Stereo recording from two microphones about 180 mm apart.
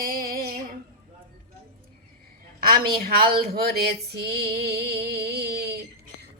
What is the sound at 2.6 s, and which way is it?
Speech, 55° right (ahead or behind).